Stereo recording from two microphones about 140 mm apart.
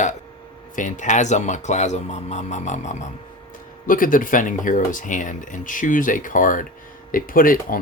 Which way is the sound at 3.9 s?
80° left.